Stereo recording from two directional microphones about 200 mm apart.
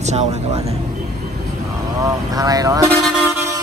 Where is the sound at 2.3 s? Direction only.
20° right (ahead or behind).